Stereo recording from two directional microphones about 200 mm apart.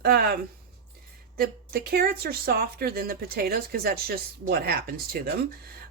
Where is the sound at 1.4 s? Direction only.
50° right (ahead or behind).